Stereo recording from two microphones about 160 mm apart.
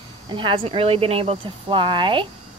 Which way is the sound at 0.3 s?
35° right (ahead or behind).